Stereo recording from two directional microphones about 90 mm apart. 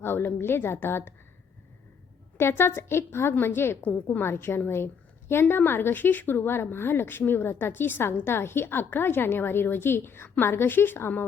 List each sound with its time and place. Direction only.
0.0 s speech: 25° left (ahead or behind)
2.4 s speech: 25° left (ahead or behind)